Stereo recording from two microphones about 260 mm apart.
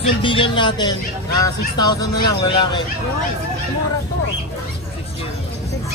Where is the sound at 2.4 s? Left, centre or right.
Centre.